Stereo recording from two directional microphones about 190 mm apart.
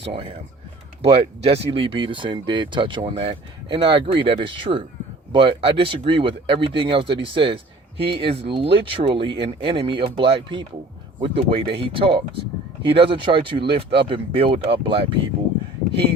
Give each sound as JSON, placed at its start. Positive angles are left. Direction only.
{"t": 0.0, "sound": "speech", "side_deg": -30}